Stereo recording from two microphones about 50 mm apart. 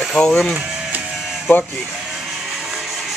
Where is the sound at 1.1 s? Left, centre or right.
Centre.